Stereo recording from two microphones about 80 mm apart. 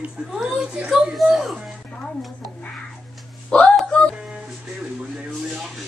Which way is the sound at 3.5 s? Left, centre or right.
Centre.